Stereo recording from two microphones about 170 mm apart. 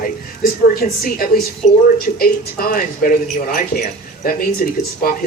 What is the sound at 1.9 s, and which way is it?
A woman's voice, 60° left (ahead or behind).